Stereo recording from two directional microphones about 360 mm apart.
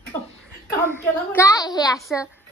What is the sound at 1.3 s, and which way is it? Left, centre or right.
Speech, centre.